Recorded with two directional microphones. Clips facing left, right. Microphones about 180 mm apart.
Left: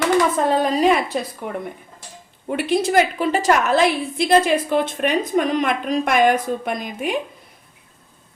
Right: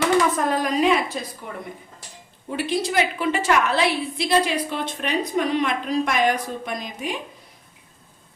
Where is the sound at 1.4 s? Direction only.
65° left (ahead or behind).